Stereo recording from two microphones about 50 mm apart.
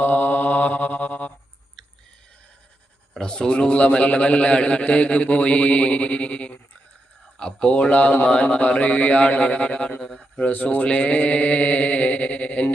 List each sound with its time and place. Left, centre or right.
0.0 s mantra: left
3.2 s a man's voice: centre
10.5 s speech: left
10.8 s a man's voice: left